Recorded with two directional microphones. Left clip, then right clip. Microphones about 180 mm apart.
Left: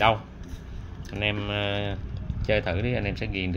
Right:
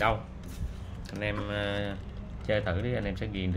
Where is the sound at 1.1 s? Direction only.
20° left (ahead or behind).